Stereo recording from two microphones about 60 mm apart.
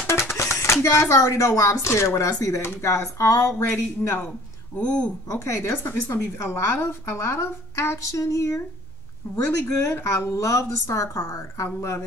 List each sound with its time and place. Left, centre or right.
0.0 s music: left
0.8 s a woman's voice: left
5.3 s a woman's voice: left